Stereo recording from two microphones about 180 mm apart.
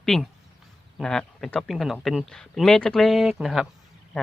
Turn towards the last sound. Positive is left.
turn(degrees=0)  # may be behind; listen again after turning